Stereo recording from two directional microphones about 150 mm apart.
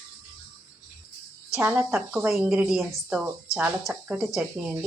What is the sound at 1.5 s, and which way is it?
Speech, 15° right (ahead or behind).